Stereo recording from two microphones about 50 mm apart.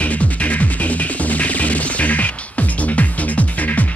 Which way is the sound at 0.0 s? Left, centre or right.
Left.